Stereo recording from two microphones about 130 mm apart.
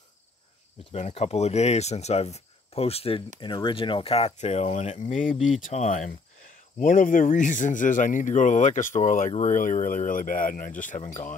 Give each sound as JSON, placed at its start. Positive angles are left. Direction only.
{"t": 0.9, "sound": "speech", "side_deg": 60}
{"t": 6.8, "sound": "speech", "side_deg": 90}
{"t": 11.1, "sound": "speech", "side_deg": 75}